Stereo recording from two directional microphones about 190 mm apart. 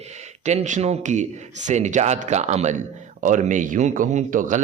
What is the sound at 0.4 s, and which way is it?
A man's voice, 40° right (ahead or behind).